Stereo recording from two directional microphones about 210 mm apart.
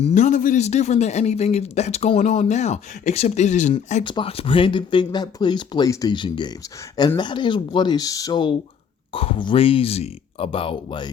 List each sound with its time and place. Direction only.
0.0 s a man's voice: 35° left (ahead or behind)
4.0 s speech: 25° left (ahead or behind)